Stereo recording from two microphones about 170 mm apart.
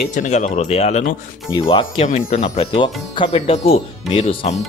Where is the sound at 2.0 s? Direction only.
40° left (ahead or behind).